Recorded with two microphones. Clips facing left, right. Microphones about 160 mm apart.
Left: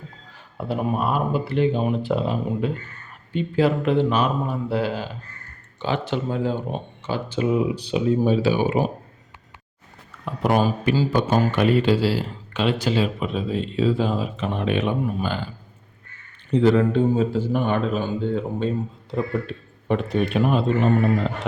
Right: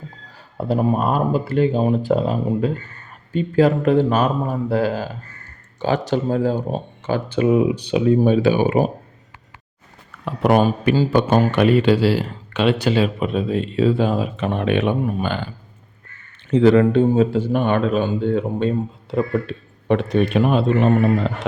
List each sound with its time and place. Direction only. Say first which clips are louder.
0.3 s speech: right 6 dB; 40° right (ahead or behind)
7.1 s speech: right 5 dB; 55° right (ahead or behind)
10.2 s speech: right 4 dB; 65° right (ahead or behind)
16.5 s speech: right 4 dB; 90° right; by 18.7 s 65° right (ahead or behind)
19.9 s speech: right 4 dB; 80° right